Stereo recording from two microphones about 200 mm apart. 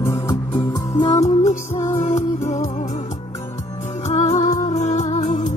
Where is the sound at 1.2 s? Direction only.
35° left (ahead or behind).